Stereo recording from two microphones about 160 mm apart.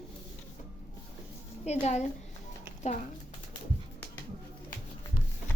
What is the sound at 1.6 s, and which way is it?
Speech, 45° left (ahead or behind).